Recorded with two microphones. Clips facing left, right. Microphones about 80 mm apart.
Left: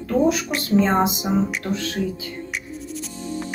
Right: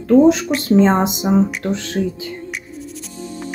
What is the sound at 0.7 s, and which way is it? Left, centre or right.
A woman's voice, right.